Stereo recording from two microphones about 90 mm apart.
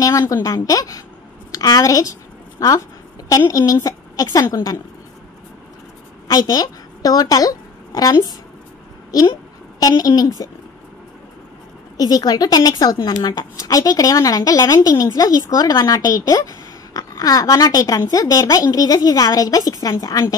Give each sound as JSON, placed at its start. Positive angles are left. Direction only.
{"t": 0.2, "sound": "a woman's voice", "side_deg": 40}
{"t": 6.2, "sound": "speech", "side_deg": 45}
{"t": 9.8, "sound": "a woman's voice", "side_deg": 45}
{"t": 12.0, "sound": "a woman's voice", "side_deg": 45}